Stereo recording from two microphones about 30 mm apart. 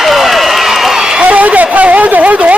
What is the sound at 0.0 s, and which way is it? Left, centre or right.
Run, centre.